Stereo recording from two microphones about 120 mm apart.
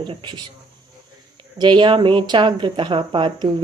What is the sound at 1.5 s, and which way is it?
Speech, 40° right (ahead or behind).